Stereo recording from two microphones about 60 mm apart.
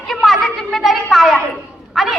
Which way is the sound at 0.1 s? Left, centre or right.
Centre.